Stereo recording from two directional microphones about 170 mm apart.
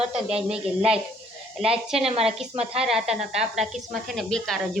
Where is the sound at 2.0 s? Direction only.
35° right (ahead or behind).